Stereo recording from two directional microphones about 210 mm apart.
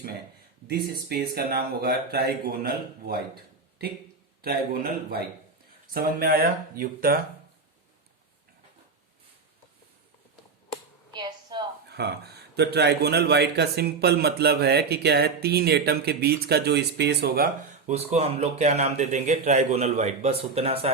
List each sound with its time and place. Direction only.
0.7 s a man's voice: 50° right (ahead or behind)
4.4 s a man's voice: 45° right (ahead or behind)
5.9 s a man's voice: 45° right (ahead or behind)
11.1 s a sound: 20° right (ahead or behind)
11.9 s a man's voice: 50° right (ahead or behind)
17.9 s a man's voice: 30° right (ahead or behind)